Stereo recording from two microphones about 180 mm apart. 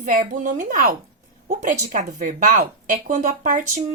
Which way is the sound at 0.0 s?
50° right (ahead or behind).